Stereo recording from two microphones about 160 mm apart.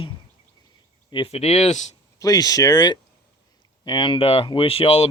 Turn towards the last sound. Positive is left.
turn(degrees=35)  # may be behind; listen again after turning